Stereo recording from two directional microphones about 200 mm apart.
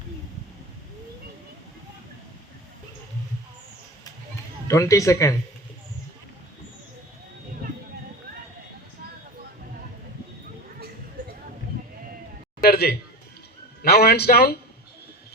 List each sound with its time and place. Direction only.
4.7 s speech: 15° left (ahead or behind)
12.6 s a sound: 50° left (ahead or behind)
13.8 s a man's voice: 50° left (ahead or behind)